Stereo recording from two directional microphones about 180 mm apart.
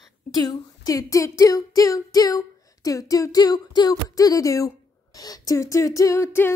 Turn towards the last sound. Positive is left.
turn(degrees=15)  # may be behind; listen again after turning